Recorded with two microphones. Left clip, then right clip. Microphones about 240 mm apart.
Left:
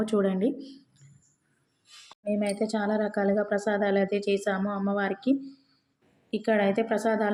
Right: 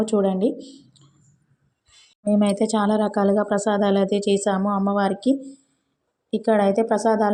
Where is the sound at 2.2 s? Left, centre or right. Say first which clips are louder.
Right 7 dB; right.